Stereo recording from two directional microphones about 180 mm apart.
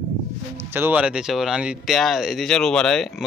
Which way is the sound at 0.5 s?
10° right (ahead or behind).